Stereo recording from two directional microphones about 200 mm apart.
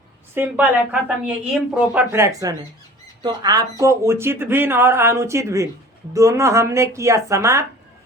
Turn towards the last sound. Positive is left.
turn(degrees=-15)  # may be behind; listen again after turning